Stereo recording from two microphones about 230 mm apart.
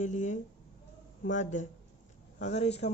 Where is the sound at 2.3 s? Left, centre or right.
Left.